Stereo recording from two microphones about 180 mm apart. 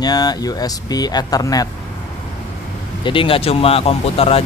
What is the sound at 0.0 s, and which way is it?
Speech, 20° left (ahead or behind).